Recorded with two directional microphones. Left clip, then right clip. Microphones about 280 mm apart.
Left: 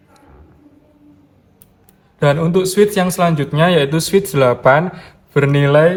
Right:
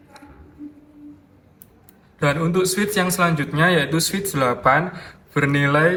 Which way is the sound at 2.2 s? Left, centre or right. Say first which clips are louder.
Left 5 dB; left.